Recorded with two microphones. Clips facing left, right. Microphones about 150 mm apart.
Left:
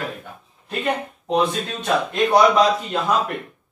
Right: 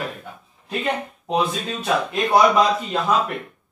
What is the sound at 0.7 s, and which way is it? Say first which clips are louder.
Speech: left 1 dB; centre (ahead or behind).